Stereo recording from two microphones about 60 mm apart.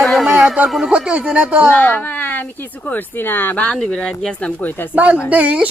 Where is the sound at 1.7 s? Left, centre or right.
Left.